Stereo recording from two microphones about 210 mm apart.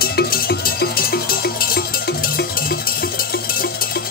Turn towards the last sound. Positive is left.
turn(degrees=45)  # may be behind; listen again after turning